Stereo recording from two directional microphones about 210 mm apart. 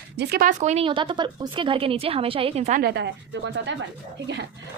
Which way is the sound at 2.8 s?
50° right (ahead or behind).